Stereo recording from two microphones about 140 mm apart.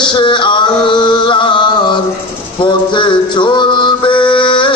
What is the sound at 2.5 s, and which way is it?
Music, 35° left (ahead or behind).